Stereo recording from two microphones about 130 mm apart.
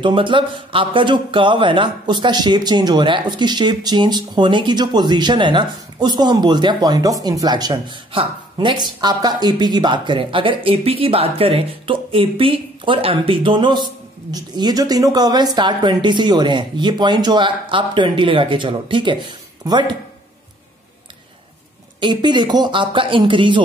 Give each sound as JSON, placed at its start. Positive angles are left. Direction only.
{"t": 0.0, "sound": "speech", "side_deg": -40}
{"t": 22.0, "sound": "speech", "side_deg": -35}